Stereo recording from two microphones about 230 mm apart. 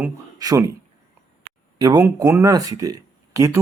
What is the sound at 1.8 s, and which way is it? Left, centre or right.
Speech, centre.